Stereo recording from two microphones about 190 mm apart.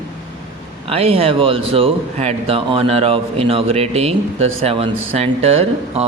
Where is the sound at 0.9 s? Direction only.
30° right (ahead or behind).